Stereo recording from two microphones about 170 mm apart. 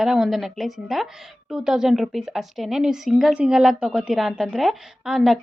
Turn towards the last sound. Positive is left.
turn(degrees=0)  # may be behind; listen again after turning